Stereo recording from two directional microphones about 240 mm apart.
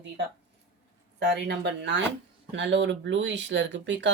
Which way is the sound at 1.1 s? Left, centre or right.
Right.